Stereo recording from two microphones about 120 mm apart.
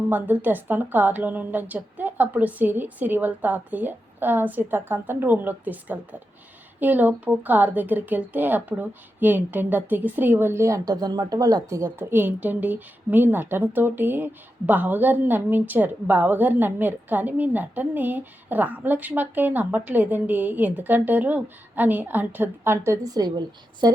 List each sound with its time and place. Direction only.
0.4 s a woman's voice: 15° right (ahead or behind); by 23.9 s 35° right (ahead or behind)